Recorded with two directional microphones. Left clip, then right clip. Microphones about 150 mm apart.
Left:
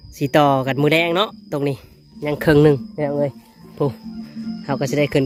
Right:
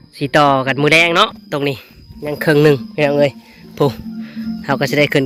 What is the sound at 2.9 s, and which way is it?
Speech, 20° right (ahead or behind).